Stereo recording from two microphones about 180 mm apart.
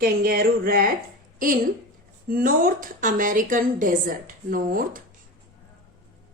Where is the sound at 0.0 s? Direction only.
55° right (ahead or behind).